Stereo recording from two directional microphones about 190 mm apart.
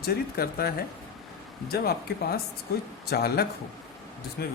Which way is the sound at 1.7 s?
55° left (ahead or behind).